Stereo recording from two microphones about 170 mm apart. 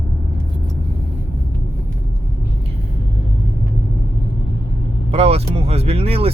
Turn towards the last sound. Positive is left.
turn(degrees=-35)  # may be behind; listen again after turning